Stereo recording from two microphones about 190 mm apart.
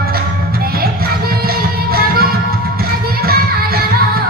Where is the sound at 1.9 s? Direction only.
50° right (ahead or behind).